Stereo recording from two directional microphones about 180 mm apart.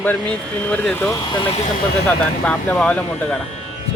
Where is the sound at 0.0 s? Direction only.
10° left (ahead or behind).